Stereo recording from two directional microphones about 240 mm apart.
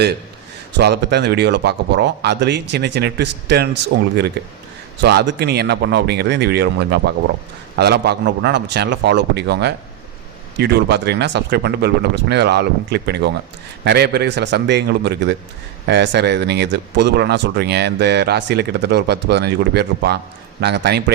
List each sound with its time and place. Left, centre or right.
0.8 s speech: right